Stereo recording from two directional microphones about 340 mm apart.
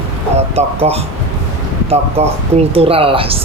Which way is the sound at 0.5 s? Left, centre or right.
Centre.